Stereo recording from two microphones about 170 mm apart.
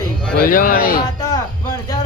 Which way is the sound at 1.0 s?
20° left (ahead or behind).